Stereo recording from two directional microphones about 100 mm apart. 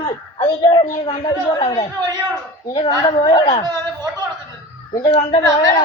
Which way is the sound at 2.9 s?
35° left (ahead or behind).